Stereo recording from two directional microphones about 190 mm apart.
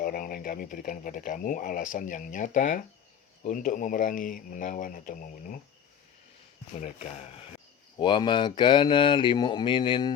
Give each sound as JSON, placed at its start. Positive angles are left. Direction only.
{"t": 0.0, "sound": "speech", "side_deg": 50}
{"t": 6.7, "sound": "speech", "side_deg": 35}